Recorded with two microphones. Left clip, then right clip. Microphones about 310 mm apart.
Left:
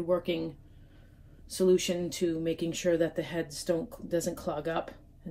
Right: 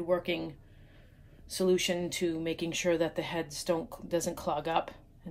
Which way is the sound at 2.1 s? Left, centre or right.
Centre.